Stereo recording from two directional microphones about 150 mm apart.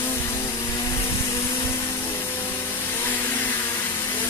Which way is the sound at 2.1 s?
15° left (ahead or behind).